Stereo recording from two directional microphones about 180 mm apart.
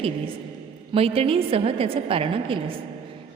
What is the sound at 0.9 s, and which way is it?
A woman's voice, 35° right (ahead or behind).